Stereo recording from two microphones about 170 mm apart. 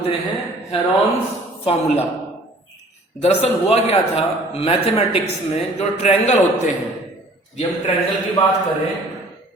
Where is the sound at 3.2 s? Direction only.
35° left (ahead or behind).